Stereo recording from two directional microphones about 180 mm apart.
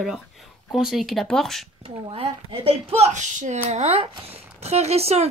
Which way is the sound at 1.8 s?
30° right (ahead or behind).